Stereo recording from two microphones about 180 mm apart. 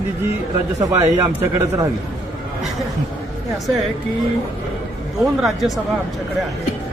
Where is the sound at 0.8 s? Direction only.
20° right (ahead or behind).